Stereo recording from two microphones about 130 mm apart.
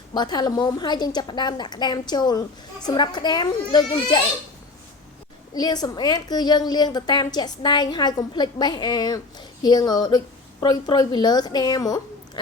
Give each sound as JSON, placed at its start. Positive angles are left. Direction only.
{"t": 0.1, "sound": "a woman's voice", "side_deg": 30}
{"t": 5.5, "sound": "a woman's voice", "side_deg": 30}